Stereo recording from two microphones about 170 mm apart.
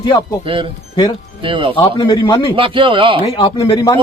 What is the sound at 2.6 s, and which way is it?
Speech, 30° right (ahead or behind).